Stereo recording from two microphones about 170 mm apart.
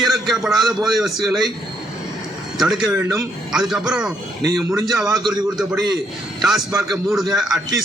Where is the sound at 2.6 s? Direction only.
5° right (ahead or behind).